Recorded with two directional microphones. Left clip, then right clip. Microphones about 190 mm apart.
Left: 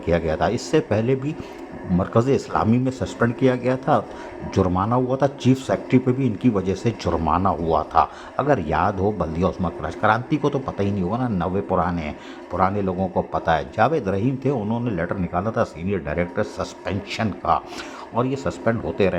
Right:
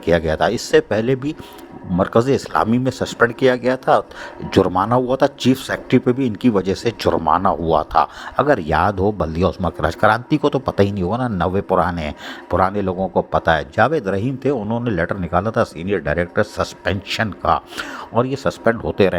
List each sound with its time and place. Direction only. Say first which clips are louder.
0.0 s a man's voice: right 4 dB; 30° right (ahead or behind)